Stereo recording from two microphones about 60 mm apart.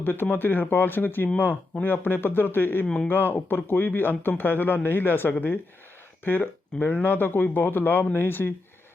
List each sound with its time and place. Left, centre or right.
0.0 s speech: left
2.8 s speech: centre
3.1 s speech: left